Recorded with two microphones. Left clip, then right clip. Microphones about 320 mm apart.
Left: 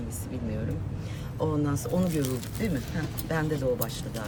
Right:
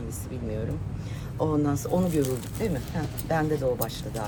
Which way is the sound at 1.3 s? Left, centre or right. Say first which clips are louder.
Right 3 dB; centre.